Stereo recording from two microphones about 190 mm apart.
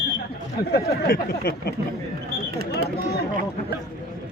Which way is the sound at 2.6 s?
55° right (ahead or behind).